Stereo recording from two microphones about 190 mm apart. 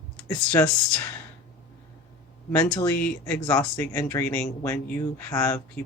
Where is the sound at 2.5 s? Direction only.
10° left (ahead or behind).